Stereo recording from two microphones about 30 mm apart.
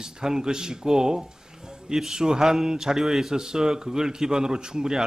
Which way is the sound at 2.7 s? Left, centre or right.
Centre.